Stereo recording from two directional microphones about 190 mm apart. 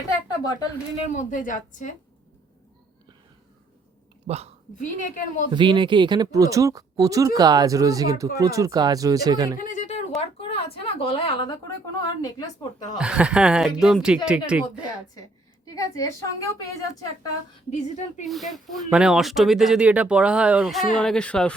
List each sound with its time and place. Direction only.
1.0 s a woman's voice: 40° left (ahead or behind)
4.3 s a woman's voice: 35° right (ahead or behind)
4.8 s a woman's voice: 40° left (ahead or behind)
5.5 s a woman's voice: 25° right (ahead or behind)
9.6 s a sound: 40° left (ahead or behind)
10.2 s speech: 30° left (ahead or behind)
13.0 s speech: 5° right (ahead or behind)
15.6 s a woman's voice: 20° left (ahead or behind)
17.7 s a woman's voice: 40° left (ahead or behind)
18.3 s speech: centre (ahead or behind)